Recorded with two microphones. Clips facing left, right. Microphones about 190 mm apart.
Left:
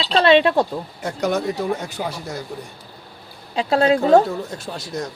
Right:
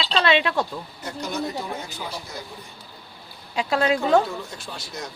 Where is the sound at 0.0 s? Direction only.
35° left (ahead or behind).